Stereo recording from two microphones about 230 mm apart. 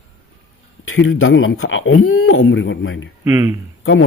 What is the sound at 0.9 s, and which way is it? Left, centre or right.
Speech, left.